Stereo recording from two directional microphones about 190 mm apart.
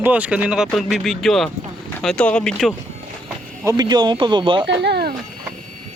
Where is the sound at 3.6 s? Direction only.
20° right (ahead or behind).